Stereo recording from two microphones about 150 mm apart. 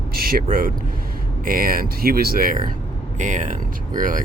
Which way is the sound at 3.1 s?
55° right (ahead or behind).